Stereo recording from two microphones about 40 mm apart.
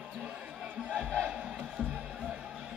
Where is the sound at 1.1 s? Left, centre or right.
Right.